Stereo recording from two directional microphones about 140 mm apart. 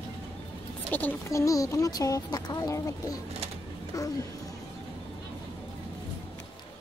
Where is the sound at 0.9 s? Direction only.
10° left (ahead or behind).